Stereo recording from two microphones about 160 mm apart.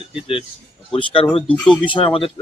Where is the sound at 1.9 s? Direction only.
30° left (ahead or behind).